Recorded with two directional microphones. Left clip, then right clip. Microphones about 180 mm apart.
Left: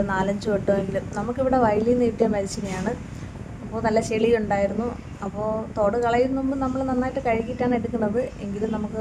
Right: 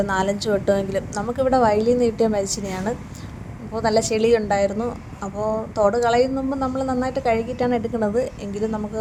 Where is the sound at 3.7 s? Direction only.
25° right (ahead or behind).